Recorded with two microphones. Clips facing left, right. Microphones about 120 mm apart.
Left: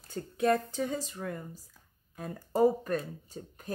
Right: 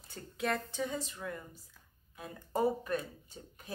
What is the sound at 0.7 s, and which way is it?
Speech, 40° left (ahead or behind).